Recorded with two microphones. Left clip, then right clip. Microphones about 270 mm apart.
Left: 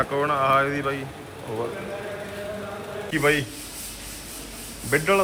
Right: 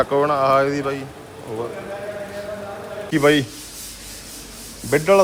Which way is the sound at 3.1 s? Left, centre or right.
Centre.